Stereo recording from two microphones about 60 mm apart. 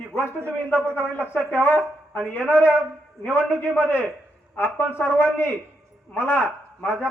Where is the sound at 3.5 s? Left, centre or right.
Left.